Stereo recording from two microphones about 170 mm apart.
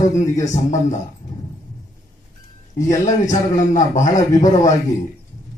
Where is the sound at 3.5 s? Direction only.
45° left (ahead or behind).